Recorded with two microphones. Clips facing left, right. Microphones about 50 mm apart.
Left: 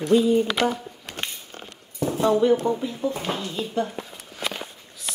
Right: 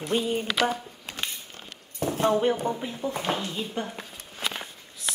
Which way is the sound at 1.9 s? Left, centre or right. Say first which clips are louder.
Left 3 dB; right.